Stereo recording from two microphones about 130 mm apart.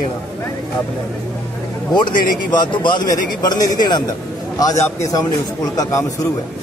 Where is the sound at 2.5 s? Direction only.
35° left (ahead or behind).